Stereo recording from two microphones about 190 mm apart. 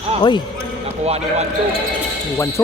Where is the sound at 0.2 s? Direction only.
25° left (ahead or behind).